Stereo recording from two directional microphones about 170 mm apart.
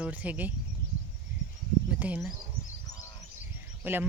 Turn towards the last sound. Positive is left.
turn(degrees=-10)  # may be behind; listen again after turning